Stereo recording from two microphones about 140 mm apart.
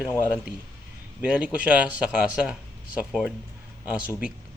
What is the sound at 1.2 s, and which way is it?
Speech, 10° right (ahead or behind).